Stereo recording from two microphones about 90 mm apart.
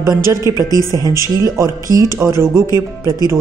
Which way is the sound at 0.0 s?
35° right (ahead or behind).